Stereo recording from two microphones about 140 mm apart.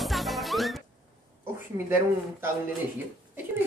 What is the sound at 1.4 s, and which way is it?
Speech, 15° right (ahead or behind).